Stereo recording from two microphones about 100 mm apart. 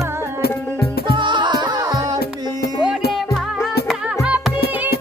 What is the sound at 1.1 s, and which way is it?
Music, 50° right (ahead or behind).